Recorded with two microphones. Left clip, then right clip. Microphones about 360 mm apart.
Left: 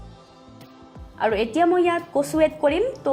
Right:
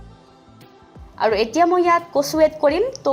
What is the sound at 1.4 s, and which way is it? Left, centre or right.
A woman's voice, right.